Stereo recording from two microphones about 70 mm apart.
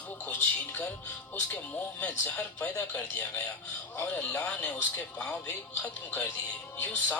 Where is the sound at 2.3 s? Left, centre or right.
Centre.